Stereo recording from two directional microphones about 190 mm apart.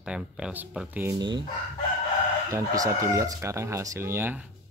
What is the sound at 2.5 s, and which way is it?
Speech, 15° right (ahead or behind).